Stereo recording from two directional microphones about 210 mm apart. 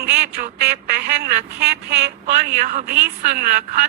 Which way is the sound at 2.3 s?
35° right (ahead or behind).